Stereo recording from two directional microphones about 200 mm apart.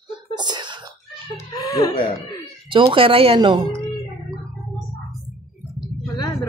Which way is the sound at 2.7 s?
25° right (ahead or behind).